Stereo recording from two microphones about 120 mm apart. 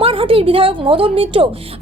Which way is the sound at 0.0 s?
50° right (ahead or behind).